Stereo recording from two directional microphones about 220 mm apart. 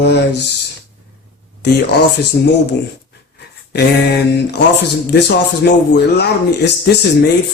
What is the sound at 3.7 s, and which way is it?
Speech, 50° left (ahead or behind).